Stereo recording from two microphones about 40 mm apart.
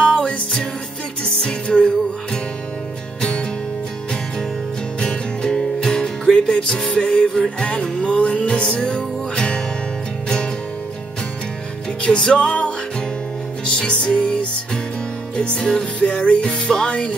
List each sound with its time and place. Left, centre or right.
0.0 s music: left
3.2 s music: left
5.0 s music: centre
12.2 s music: left
13.7 s music: left
15.4 s music: left
16.4 s music: centre